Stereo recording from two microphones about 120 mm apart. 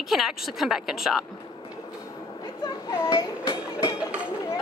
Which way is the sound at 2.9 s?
25° left (ahead or behind).